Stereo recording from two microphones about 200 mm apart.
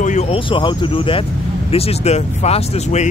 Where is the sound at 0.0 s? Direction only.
35° left (ahead or behind).